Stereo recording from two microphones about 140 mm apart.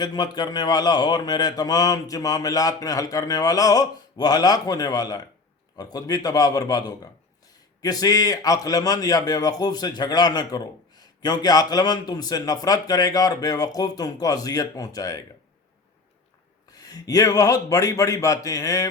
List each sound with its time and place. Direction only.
0.0 s a man's voice: 30° left (ahead or behind)
16.7 s a man's voice: 25° left (ahead or behind)